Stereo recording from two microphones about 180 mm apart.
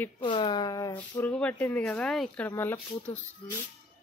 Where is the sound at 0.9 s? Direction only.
10° left (ahead or behind).